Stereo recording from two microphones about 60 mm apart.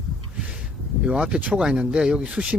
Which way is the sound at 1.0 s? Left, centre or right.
Centre.